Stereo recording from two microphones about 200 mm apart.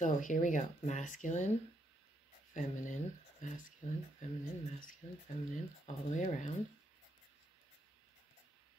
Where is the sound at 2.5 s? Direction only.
40° left (ahead or behind).